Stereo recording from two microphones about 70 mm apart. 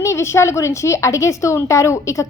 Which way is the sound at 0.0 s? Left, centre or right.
Left.